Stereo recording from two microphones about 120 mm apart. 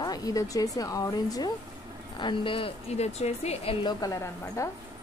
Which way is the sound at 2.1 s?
45° left (ahead or behind).